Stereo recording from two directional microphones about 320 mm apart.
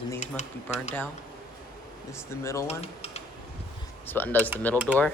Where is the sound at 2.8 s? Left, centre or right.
Centre.